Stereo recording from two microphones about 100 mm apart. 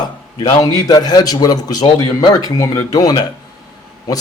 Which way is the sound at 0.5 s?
40° left (ahead or behind).